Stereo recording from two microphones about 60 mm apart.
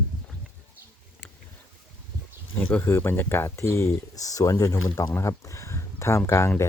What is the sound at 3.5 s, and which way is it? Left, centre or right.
Speech, left.